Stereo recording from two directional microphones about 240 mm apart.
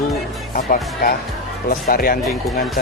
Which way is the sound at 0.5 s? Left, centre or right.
Left.